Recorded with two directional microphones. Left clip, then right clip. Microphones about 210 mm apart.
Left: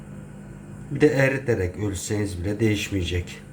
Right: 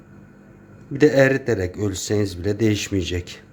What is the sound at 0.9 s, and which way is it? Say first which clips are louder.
Speech: right 4 dB; 50° right (ahead or behind).